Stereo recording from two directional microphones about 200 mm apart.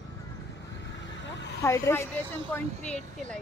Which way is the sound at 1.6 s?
15° left (ahead or behind).